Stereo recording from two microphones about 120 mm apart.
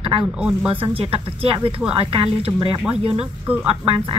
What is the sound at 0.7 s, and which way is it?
A woman's voice, 50° right (ahead or behind).